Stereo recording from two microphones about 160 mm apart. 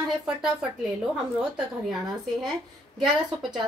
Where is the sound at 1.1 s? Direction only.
5° right (ahead or behind).